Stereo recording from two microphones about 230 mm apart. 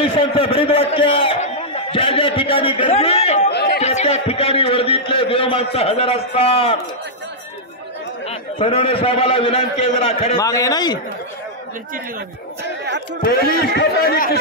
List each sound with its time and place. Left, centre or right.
0.0 s a man's voice: left
3.4 s chatter: left
3.8 s a man's voice: left
8.3 s a man's voice: left
10.4 s a man's voice: centre
13.2 s speech: left